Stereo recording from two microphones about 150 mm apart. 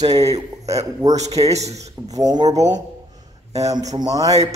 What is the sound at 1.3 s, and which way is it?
Speech, 45° right (ahead or behind).